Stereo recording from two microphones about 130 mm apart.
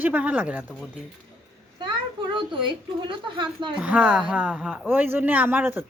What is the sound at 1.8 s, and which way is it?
A child's voice, 35° right (ahead or behind).